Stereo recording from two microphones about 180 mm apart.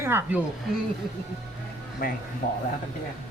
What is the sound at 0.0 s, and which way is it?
Speech, 10° right (ahead or behind).